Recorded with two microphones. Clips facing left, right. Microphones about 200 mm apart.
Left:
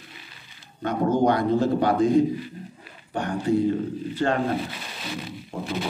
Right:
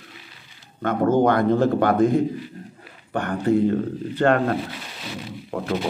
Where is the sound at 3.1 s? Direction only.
60° right (ahead or behind).